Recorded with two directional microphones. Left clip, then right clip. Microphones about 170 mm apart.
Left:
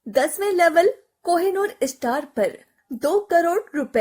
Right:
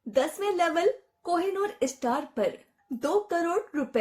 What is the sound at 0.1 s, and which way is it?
A woman's voice, 50° left (ahead or behind).